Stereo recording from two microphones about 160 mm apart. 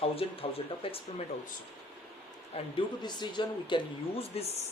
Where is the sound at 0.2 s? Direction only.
35° left (ahead or behind).